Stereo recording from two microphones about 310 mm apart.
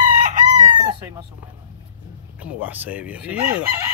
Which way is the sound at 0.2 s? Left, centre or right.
Right.